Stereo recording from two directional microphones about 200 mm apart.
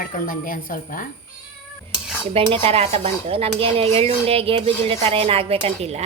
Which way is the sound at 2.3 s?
30° right (ahead or behind).